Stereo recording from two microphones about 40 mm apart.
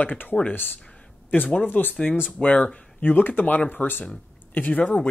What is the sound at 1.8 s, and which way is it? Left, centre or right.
Speech, left.